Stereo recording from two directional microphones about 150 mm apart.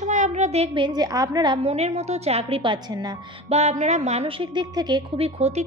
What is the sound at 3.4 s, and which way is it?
A woman's voice, 45° right (ahead or behind).